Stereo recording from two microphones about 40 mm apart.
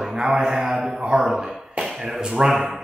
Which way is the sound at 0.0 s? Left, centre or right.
Centre.